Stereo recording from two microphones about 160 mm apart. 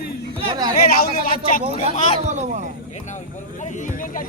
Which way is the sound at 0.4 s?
25° right (ahead or behind).